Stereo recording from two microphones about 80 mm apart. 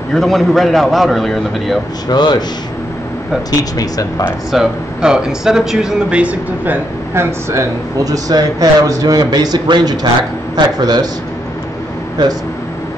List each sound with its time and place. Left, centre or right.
0.1 s a man's voice: centre
2.0 s speech: left
4.5 s speech: centre; by 7.6 s right
8.0 s a man's voice: right